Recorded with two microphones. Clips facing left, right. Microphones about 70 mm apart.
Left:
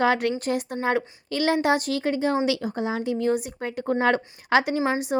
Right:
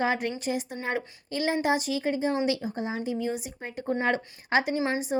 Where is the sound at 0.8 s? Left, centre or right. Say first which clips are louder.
Left 7 dB; left.